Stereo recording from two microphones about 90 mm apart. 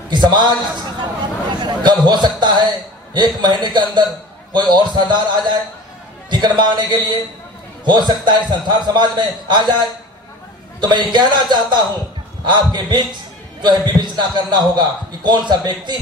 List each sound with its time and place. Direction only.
0.1 s a man's voice: 55° right (ahead or behind)
1.5 s a man's voice: 55° right (ahead or behind)